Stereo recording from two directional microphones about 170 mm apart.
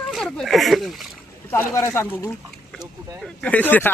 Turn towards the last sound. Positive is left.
turn(degrees=10)  # may be behind; listen again after turning